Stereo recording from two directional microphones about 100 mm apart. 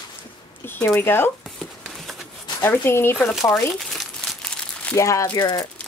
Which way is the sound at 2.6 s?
25° left (ahead or behind).